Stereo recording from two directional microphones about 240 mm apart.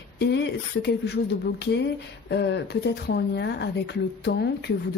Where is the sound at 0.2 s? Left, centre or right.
Left.